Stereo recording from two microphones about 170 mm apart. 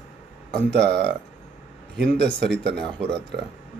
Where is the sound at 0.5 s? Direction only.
80° right.